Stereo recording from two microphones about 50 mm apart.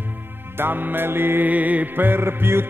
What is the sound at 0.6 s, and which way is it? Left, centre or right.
Music, right.